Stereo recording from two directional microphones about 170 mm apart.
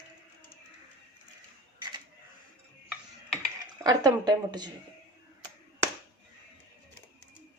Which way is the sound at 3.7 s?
25° right (ahead or behind).